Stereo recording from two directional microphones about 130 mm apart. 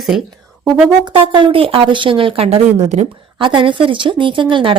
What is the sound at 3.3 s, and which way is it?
A woman's voice, 40° right (ahead or behind).